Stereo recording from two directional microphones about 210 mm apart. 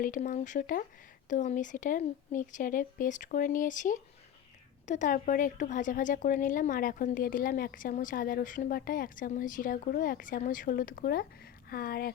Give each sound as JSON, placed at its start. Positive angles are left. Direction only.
{"t": 0.0, "sound": "a woman's voice", "side_deg": 40}